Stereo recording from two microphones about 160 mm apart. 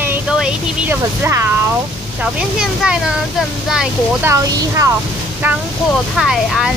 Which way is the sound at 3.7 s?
15° right (ahead or behind).